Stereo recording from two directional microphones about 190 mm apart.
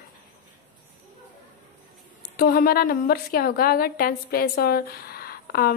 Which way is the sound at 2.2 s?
55° left (ahead or behind).